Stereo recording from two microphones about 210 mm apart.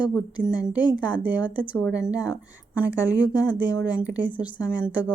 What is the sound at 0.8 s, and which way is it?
Speech, 20° left (ahead or behind).